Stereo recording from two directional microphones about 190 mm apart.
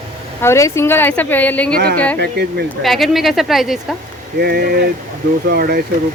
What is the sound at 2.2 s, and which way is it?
Speech, 60° right (ahead or behind).